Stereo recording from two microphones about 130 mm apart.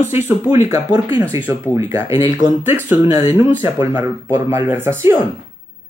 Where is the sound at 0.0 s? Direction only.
20° right (ahead or behind).